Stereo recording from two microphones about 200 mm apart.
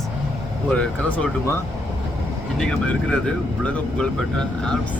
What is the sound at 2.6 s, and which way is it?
Speech, 5° left (ahead or behind).